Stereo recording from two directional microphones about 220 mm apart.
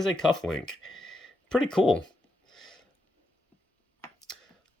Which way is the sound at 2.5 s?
Centre (ahead or behind).